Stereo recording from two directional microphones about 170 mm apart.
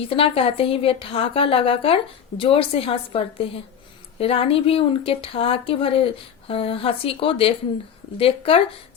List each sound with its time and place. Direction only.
0.1 s speech: 35° left (ahead or behind)